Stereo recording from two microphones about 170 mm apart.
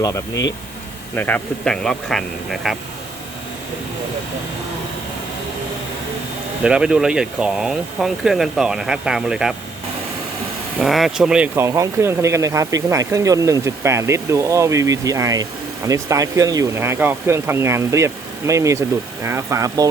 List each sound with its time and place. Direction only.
0.0 s speech: 20° left (ahead or behind); by 2.7 s centre (ahead or behind)
6.6 s speech: 5° right (ahead or behind)
10.8 s speech: centre (ahead or behind); by 19.9 s 20° right (ahead or behind)